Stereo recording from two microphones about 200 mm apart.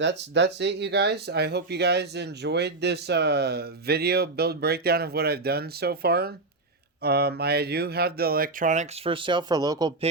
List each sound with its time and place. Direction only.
0.0 s speech: 60° right (ahead or behind); by 9.1 s 35° right (ahead or behind)
9.1 s speech: 25° right (ahead or behind)